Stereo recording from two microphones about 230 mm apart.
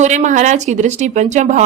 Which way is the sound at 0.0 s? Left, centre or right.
Right.